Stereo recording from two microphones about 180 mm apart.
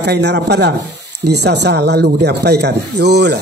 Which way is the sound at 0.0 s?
70° right (ahead or behind).